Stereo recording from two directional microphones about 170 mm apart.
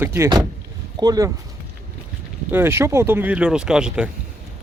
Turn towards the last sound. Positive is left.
turn(degrees=-5)  # may be behind; listen again after turning